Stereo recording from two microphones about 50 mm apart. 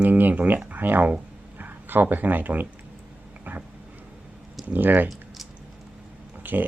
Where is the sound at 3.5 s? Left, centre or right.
Right.